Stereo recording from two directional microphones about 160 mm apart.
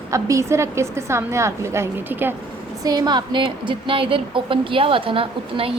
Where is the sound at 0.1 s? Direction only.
20° right (ahead or behind).